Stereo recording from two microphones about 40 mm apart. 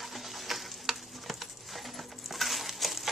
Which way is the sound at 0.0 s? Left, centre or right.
Centre.